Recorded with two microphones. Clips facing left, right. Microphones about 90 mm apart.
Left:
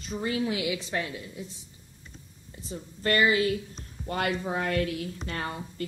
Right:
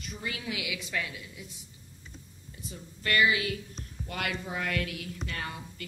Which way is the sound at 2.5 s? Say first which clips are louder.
Left 5 dB; 35° left (ahead or behind).